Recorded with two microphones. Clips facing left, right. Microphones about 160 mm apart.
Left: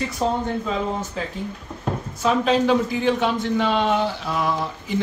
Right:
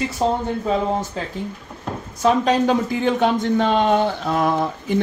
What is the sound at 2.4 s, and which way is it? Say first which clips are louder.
A man's voice: right 1 dB; 45° right (ahead or behind).